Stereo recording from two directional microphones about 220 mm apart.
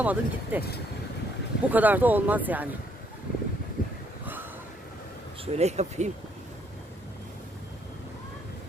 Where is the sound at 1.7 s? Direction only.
10° right (ahead or behind).